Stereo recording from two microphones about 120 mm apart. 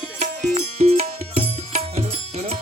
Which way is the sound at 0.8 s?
60° right (ahead or behind).